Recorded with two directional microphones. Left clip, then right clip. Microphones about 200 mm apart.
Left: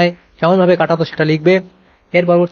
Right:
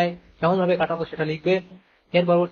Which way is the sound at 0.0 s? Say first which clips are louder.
Left 8 dB; 40° left (ahead or behind).